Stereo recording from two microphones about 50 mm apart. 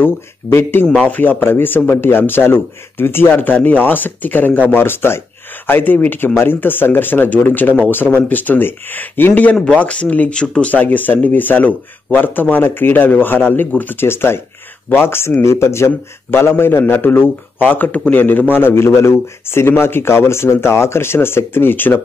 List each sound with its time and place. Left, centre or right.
0.5 s speech: left
1.0 s speech: left
1.4 s speech: left
5.7 s speech: left
9.3 s speech: left
10.7 s speech: left
17.6 s speech: left